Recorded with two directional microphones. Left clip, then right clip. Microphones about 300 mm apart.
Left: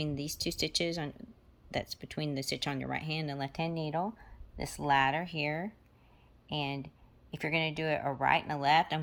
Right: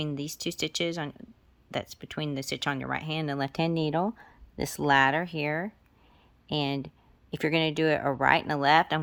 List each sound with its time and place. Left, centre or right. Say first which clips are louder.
0.0 s speech: right 3 dB; centre